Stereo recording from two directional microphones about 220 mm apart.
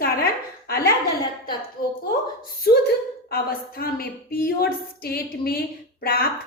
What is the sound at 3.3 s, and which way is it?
A woman's voice, 45° left (ahead or behind).